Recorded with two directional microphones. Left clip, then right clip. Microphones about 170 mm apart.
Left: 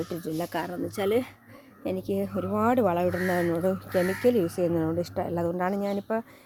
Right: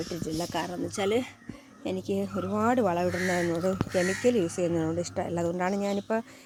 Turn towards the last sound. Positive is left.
turn(degrees=-5)  # may be behind; listen again after turning